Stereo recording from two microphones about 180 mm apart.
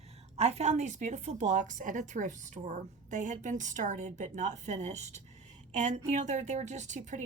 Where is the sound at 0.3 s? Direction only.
40° right (ahead or behind).